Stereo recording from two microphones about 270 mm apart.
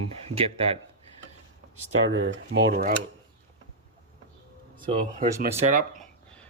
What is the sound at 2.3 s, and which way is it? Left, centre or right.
Speech, right.